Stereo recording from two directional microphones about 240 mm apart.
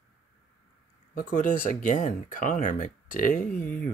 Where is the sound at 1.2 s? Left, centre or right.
Left.